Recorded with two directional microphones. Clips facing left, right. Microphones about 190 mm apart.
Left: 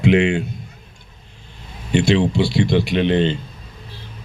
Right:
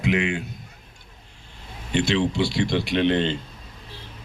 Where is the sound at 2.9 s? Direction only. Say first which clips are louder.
Even; 5° left (ahead or behind).